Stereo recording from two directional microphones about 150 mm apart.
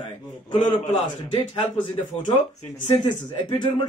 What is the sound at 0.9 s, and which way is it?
Speech, 35° left (ahead or behind).